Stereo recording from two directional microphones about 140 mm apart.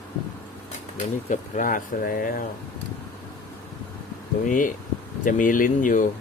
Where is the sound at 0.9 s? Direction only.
65° left (ahead or behind); by 2.4 s 90° left.